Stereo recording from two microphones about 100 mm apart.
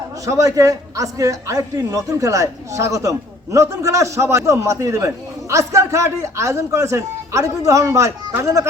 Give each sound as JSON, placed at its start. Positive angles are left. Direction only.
{"t": 0.3, "sound": "a man's voice", "side_deg": -35}